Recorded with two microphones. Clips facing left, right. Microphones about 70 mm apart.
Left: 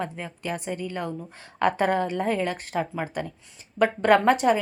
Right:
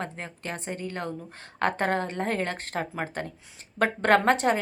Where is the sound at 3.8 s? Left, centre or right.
Right.